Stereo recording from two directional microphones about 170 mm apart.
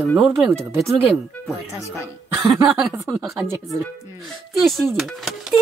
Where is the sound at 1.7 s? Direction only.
15° left (ahead or behind).